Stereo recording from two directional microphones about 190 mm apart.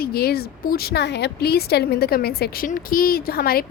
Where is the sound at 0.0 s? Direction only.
55° left (ahead or behind).